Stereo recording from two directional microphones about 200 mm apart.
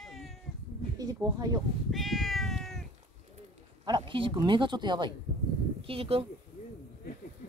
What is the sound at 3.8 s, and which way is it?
Speech, 25° right (ahead or behind).